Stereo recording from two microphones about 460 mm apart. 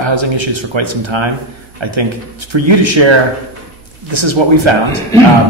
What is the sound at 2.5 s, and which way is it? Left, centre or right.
A man's voice, right.